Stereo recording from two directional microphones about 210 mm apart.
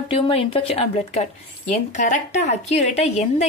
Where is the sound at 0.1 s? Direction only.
25° left (ahead or behind).